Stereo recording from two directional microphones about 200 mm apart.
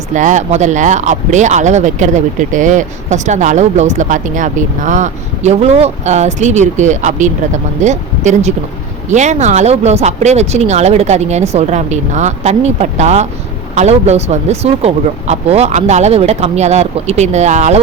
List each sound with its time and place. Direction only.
0.1 s speech: 40° right (ahead or behind)